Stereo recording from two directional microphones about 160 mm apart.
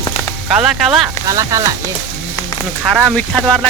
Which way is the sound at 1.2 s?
20° right (ahead or behind).